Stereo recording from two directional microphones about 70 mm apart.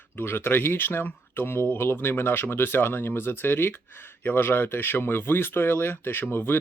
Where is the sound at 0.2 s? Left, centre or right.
Left.